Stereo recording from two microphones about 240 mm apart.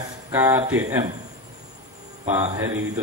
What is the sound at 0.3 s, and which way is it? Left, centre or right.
Speech, centre.